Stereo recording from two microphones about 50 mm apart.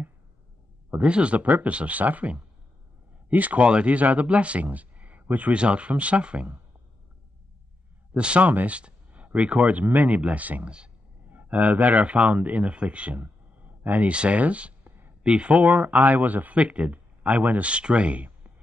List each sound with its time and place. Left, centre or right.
0.9 s speech: right
8.1 s speech: right
14.9 s a sound: right
15.2 s speech: right